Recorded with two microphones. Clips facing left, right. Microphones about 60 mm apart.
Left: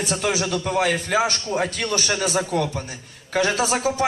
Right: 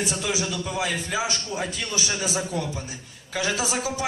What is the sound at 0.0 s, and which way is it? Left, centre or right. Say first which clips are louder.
A man's voice: left 4 dB; left.